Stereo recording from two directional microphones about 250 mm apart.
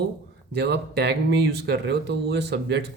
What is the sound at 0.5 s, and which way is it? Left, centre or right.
Speech, right.